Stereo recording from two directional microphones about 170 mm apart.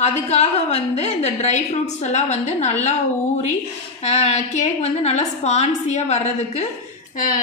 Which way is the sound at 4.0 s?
40° left (ahead or behind).